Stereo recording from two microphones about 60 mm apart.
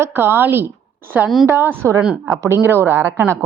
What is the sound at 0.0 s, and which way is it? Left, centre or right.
Speech, right.